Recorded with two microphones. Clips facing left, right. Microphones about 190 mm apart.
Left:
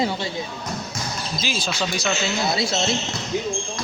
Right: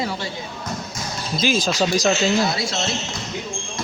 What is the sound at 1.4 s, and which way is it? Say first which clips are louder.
Speech: right 8 dB; 45° right (ahead or behind).